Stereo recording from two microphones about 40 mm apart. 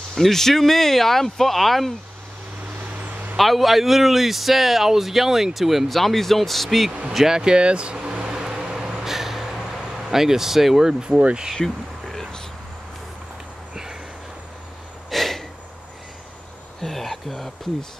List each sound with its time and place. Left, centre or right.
0.1 s speech: centre
2.8 s vehicle: right
3.3 s speech: centre
5.9 s speech: centre
7.2 s speech: centre; by 8.2 s right
8.2 s vehicle: centre
9.8 s speech: centre
11.1 s speech: right
11.5 s a sound: centre
15.0 s gasp: centre
16.8 s a sound: centre